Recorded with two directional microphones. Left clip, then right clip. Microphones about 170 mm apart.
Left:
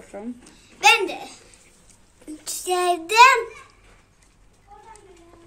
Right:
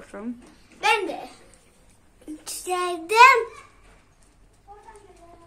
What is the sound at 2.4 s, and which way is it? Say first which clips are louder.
Child singing: left 5 dB; 5° right (ahead or behind).